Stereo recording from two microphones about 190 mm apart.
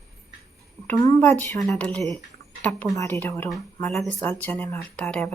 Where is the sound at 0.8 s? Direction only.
15° left (ahead or behind).